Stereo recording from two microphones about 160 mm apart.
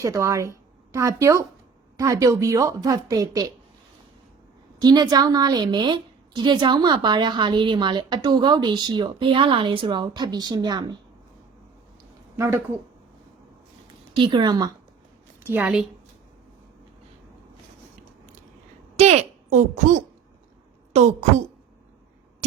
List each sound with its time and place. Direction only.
0.0 s a woman's voice: 20° right (ahead or behind)
4.8 s a woman's voice: 25° right (ahead or behind)
12.4 s a woman's voice: 15° right (ahead or behind)
14.2 s a woman's voice: 30° right (ahead or behind)
15.4 s a woman's voice: 10° right (ahead or behind)
18.9 s a sound: 45° right (ahead or behind)
20.9 s a woman's voice: 45° right (ahead or behind)